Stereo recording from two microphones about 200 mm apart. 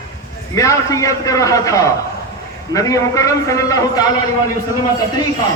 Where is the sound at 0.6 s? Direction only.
15° left (ahead or behind).